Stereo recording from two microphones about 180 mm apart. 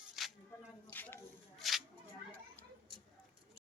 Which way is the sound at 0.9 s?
10° left (ahead or behind).